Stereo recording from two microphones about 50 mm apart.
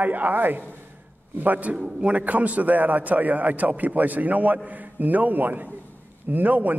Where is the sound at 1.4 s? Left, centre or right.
Right.